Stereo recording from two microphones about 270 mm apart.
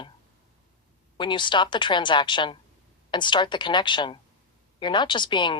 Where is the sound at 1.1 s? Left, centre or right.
Centre.